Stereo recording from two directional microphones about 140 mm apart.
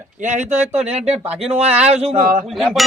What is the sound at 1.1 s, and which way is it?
Speech, 5° right (ahead or behind).